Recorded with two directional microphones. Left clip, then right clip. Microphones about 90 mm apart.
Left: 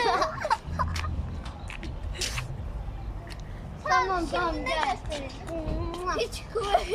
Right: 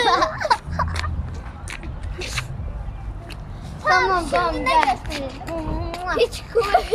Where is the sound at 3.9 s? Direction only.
5° left (ahead or behind).